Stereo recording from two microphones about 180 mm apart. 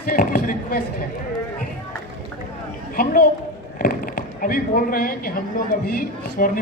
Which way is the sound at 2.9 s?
50° left (ahead or behind).